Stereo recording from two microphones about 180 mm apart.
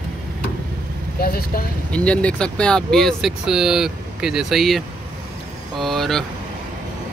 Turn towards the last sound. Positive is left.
turn(degrees=0)  # may be behind; listen again after turning